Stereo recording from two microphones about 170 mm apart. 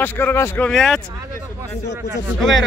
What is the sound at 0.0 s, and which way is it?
A man's voice, 10° left (ahead or behind).